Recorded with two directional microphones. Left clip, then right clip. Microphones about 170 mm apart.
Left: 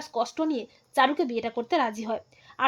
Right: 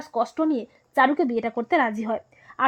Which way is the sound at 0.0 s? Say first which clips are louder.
Right 4 dB; 25° right (ahead or behind).